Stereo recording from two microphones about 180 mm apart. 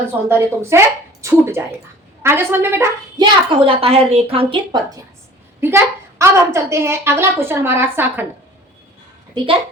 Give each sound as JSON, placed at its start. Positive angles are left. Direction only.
{"t": 0.3, "sound": "a woman's voice", "side_deg": -15}
{"t": 3.2, "sound": "a woman's voice", "side_deg": -30}
{"t": 5.5, "sound": "a woman's voice", "side_deg": -15}